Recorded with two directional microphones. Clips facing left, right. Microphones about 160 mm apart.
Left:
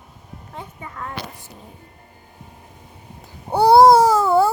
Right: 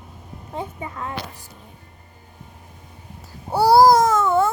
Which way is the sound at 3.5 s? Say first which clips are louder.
Left 2 dB; 20° left (ahead or behind).